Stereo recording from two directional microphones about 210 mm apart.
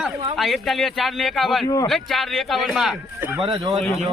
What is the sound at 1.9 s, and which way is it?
Speech, centre (ahead or behind).